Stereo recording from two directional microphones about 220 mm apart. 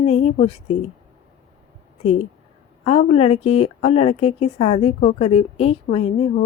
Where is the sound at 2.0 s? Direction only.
30° left (ahead or behind).